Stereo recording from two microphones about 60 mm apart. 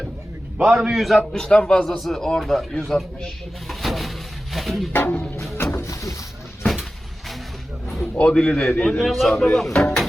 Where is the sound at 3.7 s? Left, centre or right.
Centre.